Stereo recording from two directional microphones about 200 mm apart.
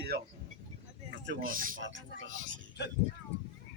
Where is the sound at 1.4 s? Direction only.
45° right (ahead or behind).